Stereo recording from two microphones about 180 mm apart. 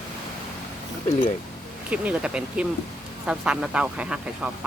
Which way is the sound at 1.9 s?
5° right (ahead or behind).